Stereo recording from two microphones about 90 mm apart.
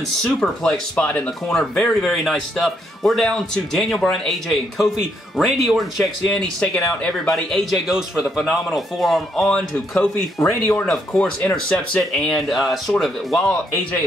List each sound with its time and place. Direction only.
0.2 s speech: 10° left (ahead or behind)
10.4 s speech: 30° left (ahead or behind)
10.7 s speech: 10° left (ahead or behind)